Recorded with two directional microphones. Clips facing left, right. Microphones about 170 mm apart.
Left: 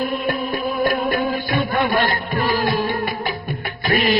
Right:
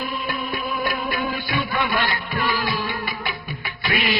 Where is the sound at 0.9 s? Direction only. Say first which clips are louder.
Left 7 dB; 45° left (ahead or behind).